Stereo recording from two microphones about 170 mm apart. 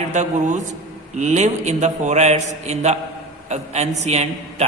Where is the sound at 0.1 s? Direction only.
45° right (ahead or behind).